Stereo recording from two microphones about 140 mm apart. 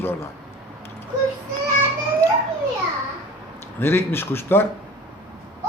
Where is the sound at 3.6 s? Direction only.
15° left (ahead or behind).